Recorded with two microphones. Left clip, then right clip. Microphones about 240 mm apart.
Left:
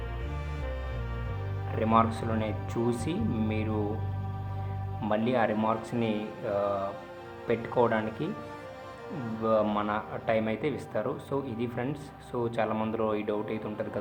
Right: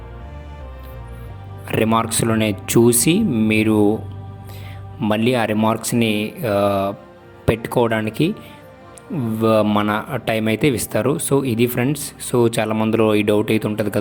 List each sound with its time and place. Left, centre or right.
1.6 s speech: right
4.9 s speech: right
9.4 s speech: right